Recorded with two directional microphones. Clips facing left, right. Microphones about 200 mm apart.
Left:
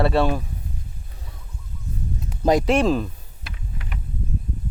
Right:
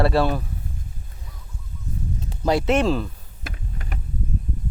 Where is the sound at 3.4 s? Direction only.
45° right (ahead or behind).